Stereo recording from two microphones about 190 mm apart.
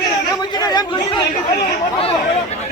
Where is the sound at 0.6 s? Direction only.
20° left (ahead or behind).